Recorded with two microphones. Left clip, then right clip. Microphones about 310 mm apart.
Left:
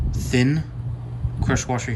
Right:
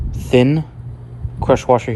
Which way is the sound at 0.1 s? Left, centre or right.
Centre.